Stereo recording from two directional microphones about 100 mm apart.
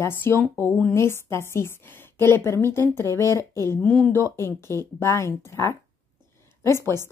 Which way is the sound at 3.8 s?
15° left (ahead or behind).